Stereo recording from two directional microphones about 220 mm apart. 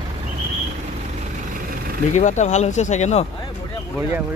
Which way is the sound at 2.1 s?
35° left (ahead or behind).